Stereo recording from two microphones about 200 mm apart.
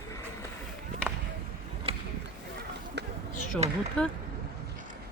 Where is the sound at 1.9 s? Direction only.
30° right (ahead or behind).